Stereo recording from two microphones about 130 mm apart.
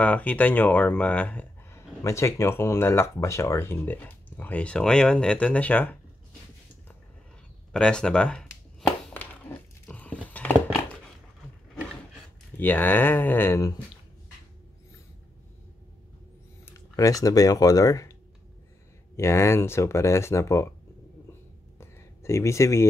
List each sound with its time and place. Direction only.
0.0 s speech: 10° left (ahead or behind)
7.7 s a sound: 5° left (ahead or behind)
12.5 s speech: 15° left (ahead or behind)
16.6 s speech: 25° left (ahead or behind)
19.1 s speech: 20° left (ahead or behind)
21.7 s a sound: 20° left (ahead or behind)